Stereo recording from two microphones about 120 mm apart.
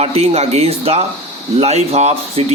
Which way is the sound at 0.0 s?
60° right (ahead or behind).